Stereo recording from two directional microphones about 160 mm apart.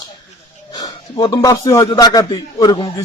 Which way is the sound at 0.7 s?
25° left (ahead or behind).